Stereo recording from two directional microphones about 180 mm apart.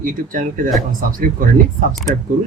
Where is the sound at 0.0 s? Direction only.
50° right (ahead or behind).